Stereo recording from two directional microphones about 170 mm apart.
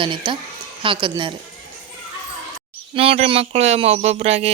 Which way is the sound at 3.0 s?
35° right (ahead or behind).